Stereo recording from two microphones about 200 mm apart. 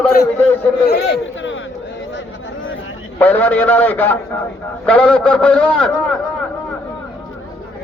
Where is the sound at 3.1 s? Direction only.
10° left (ahead or behind).